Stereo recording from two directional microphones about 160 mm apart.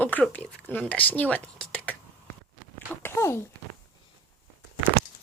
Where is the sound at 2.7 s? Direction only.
15° left (ahead or behind).